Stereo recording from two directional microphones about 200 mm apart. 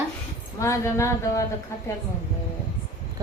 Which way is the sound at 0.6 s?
15° left (ahead or behind).